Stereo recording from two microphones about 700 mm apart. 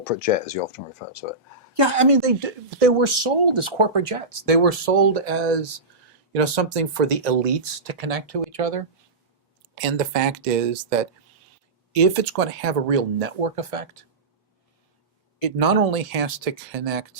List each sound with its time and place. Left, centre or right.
0.0 s speech: left
1.7 s a woman's voice: right
9.7 s speech: right
11.9 s speech: right
15.4 s speech: right